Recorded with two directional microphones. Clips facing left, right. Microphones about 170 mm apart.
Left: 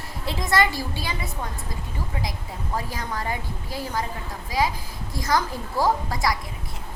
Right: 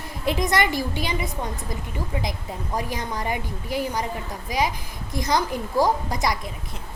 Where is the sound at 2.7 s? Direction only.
20° right (ahead or behind).